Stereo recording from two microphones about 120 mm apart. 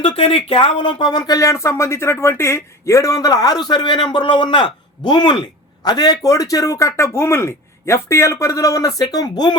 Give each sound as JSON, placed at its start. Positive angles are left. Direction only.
{"t": 0.0, "sound": "a man's voice", "side_deg": 50}